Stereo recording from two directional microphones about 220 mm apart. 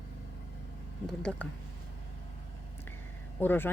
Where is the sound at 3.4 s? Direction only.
10° left (ahead or behind).